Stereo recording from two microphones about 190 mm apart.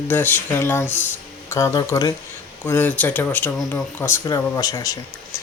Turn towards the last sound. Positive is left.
turn(degrees=20)  # may be behind; listen again after turning